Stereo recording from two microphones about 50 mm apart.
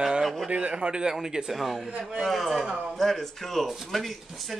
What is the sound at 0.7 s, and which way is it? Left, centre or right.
Speech, centre.